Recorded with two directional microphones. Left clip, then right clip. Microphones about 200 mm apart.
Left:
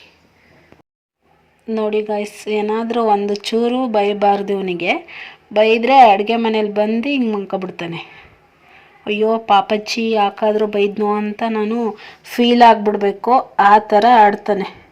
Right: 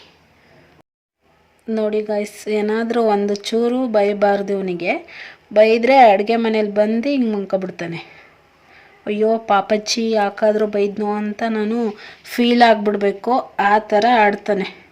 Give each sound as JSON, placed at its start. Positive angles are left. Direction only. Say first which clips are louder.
{"t": 1.6, "sound": "speech", "louder": "left 1 dB", "side_deg": -15}
{"t": 9.0, "sound": "speech", "louder": "left 2 dB", "side_deg": -15}